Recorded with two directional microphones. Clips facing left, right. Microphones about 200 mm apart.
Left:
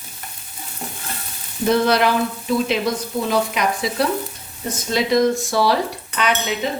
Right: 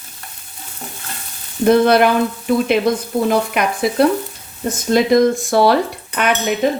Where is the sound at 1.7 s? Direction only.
55° right (ahead or behind).